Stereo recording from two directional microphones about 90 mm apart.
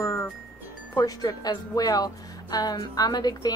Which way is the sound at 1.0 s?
45° left (ahead or behind).